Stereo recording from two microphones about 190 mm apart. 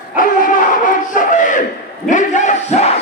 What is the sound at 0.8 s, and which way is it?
Battle cry, 45° left (ahead or behind).